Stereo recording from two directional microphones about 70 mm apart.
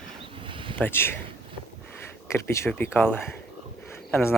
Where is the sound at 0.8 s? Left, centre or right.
Left.